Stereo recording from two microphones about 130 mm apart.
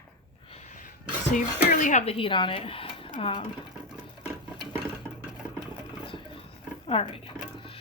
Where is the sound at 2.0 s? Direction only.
45° left (ahead or behind).